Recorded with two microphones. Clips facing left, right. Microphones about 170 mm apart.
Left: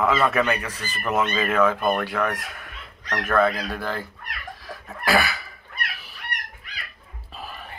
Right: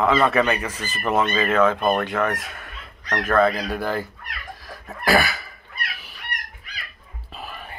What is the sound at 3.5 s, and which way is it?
Speech, 15° right (ahead or behind).